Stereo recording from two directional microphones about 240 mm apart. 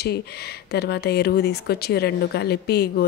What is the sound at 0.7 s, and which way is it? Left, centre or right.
Speech, left.